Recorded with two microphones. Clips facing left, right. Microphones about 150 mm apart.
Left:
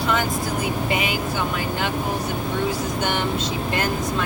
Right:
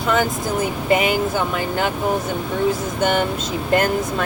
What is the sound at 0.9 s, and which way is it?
Speech, 45° right (ahead or behind).